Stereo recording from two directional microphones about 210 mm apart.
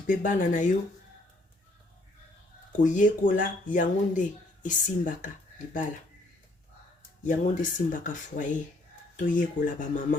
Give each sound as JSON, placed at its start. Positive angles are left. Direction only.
{"t": 0.1, "sound": "speech", "side_deg": 40}
{"t": 2.7, "sound": "speech", "side_deg": 35}
{"t": 7.3, "sound": "speech", "side_deg": 40}